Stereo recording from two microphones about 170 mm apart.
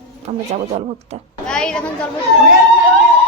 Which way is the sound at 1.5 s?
5° left (ahead or behind).